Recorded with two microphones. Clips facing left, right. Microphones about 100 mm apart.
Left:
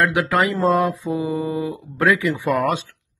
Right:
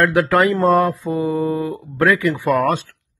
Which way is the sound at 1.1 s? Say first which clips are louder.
Right 3 dB; 15° left (ahead or behind).